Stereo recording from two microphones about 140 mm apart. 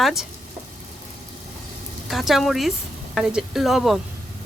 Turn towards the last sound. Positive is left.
turn(degrees=0)  # may be behind; listen again after turning